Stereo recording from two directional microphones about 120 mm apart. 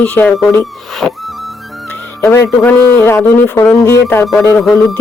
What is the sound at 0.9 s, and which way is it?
Music, centre (ahead or behind).